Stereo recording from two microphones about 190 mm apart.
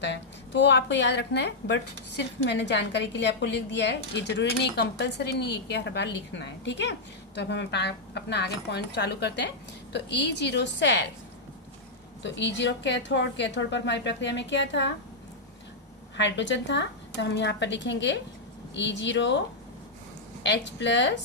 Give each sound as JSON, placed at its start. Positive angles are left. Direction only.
{"t": 0.0, "sound": "a woman's voice", "side_deg": 70}
{"t": 12.2, "sound": "a woman's voice", "side_deg": 65}
{"t": 16.1, "sound": "a woman's voice", "side_deg": 70}
{"t": 20.4, "sound": "a woman's voice", "side_deg": 70}